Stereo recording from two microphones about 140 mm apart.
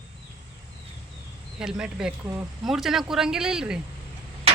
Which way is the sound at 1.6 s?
5° right (ahead or behind).